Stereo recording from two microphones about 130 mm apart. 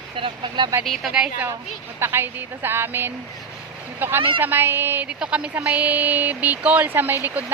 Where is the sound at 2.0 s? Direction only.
20° right (ahead or behind).